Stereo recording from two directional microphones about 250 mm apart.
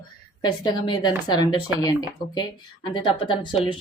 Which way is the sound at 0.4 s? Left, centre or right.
Centre.